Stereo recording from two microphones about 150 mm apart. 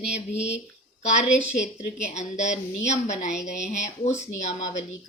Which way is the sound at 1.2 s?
50° left (ahead or behind).